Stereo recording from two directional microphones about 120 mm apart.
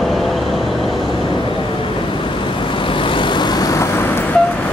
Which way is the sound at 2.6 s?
45° left (ahead or behind).